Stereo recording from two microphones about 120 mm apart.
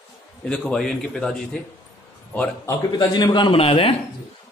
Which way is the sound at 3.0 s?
35° left (ahead or behind).